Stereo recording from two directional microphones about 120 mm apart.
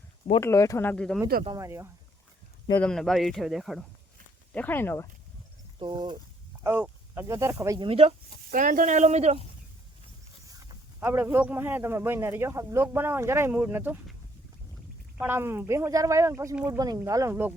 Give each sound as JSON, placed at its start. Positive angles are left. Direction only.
{"t": 0.3, "sound": "speech", "side_deg": 25}
{"t": 0.9, "sound": "speech", "side_deg": 5}
{"t": 1.5, "sound": "speech", "side_deg": -25}
{"t": 2.7, "sound": "speech", "side_deg": 5}
{"t": 4.5, "sound": "speech", "side_deg": 15}
{"t": 5.8, "sound": "speech", "side_deg": -40}
{"t": 6.6, "sound": "speech", "side_deg": -20}
{"t": 7.8, "sound": "speech", "side_deg": -50}
{"t": 8.4, "sound": "speech", "side_deg": -90}
{"t": 11.0, "sound": "speech", "side_deg": -20}
{"t": 15.2, "sound": "speech", "side_deg": -20}